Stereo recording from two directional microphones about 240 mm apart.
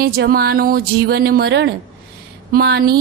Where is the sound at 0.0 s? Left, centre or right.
Right.